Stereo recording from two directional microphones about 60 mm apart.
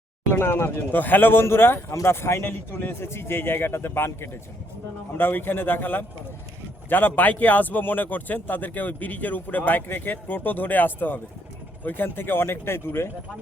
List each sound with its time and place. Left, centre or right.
0.3 s a man's voice: left
2.4 s a man's voice: left